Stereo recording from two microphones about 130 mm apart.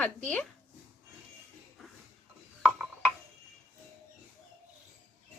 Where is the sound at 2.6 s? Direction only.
Centre (ahead or behind).